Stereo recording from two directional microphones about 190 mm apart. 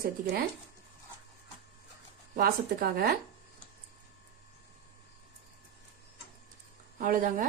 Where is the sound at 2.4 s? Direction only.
50° right (ahead or behind).